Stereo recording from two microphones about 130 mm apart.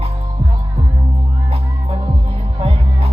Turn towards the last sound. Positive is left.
turn(degrees=-50)  # may be behind; listen again after turning